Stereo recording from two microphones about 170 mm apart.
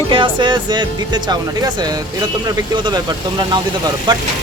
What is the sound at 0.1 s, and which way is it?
Speech, 30° right (ahead or behind).